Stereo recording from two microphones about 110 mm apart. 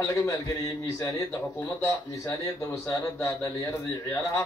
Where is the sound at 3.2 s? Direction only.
30° left (ahead or behind).